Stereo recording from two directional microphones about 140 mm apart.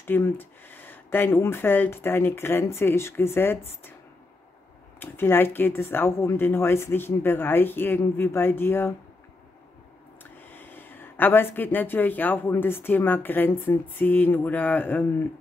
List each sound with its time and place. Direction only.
0.0 s speech: 15° left (ahead or behind)
5.0 s speech: 15° left (ahead or behind)
10.4 s speech: 15° left (ahead or behind)